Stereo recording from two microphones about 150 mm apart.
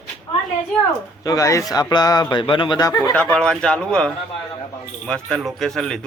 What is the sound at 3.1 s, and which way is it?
Speech, 5° left (ahead or behind).